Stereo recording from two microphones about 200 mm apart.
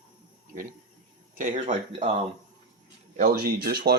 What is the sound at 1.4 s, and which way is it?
Speech, 40° right (ahead or behind).